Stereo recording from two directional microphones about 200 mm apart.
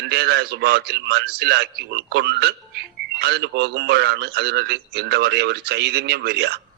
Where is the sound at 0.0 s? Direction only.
55° right (ahead or behind).